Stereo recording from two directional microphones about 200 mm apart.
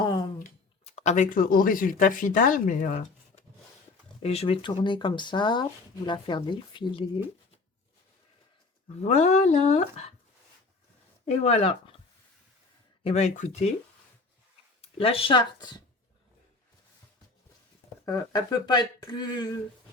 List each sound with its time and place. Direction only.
0.0 s a sound: 20° left (ahead or behind)
0.3 s speech: 40° left (ahead or behind)
9.0 s speech: 35° left (ahead or behind)
11.3 s speech: 30° left (ahead or behind)
13.1 s speech: 35° left (ahead or behind)
14.8 s speech: 30° left (ahead or behind)
18.0 s speech: 20° left (ahead or behind)